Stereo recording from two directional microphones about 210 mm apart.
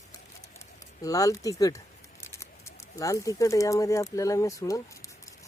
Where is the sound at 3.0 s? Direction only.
15° left (ahead or behind).